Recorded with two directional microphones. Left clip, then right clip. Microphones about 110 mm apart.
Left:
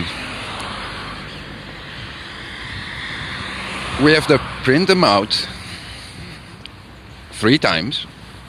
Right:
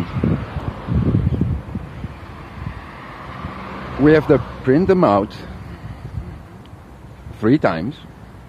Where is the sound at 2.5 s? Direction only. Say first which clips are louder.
Left 8 dB; 30° right (ahead or behind); by 4.2 s centre (ahead or behind).